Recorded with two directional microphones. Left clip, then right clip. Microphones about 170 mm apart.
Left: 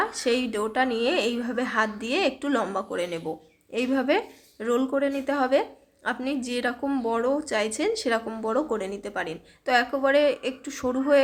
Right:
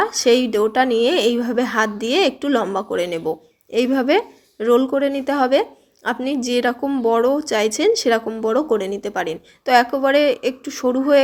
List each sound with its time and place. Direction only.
0.0 s a woman's voice: 30° right (ahead or behind)